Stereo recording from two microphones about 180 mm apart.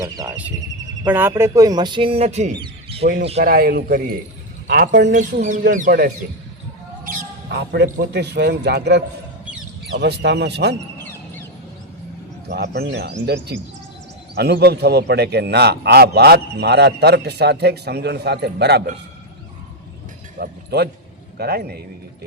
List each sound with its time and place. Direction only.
0.0 s speech: 20° right (ahead or behind)
3.4 s a man's voice: 55° right (ahead or behind); by 5.1 s 70° right (ahead or behind)
5.1 s speech: 45° right (ahead or behind)
7.1 s a sound: 60° right (ahead or behind)
8.1 s speech: 70° right (ahead or behind)
11.0 s a sound: 10° left (ahead or behind)
12.5 s a man's voice: 65° right (ahead or behind)
20.4 s a man's voice: 60° right (ahead or behind)